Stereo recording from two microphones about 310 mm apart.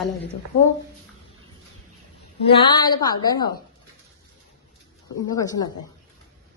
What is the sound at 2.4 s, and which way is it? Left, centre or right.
A woman's voice, centre.